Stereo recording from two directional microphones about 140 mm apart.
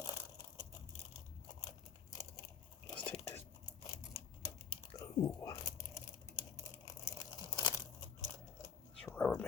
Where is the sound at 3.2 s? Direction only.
20° left (ahead or behind).